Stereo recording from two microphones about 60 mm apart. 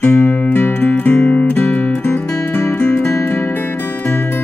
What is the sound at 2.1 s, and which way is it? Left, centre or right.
Music, left.